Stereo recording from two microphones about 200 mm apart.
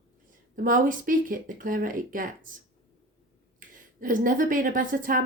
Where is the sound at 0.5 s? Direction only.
40° right (ahead or behind).